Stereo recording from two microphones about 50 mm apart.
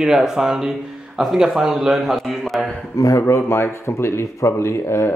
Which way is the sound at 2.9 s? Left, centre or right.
Left.